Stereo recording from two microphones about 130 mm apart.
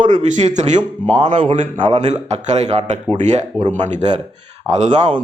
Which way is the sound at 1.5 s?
85° right.